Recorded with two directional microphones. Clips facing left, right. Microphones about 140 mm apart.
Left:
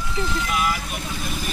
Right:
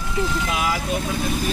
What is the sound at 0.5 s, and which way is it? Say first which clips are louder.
Speech: left 1 dB; 90° right.